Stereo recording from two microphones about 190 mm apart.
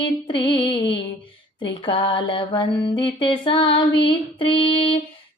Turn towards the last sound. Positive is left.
turn(degrees=30)  # may be behind; listen again after turning